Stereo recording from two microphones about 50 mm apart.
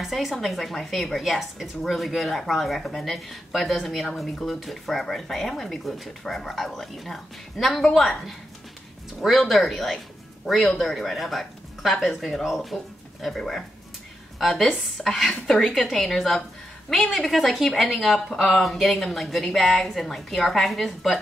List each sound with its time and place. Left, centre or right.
0.0 s speech: centre
14.4 s speech: centre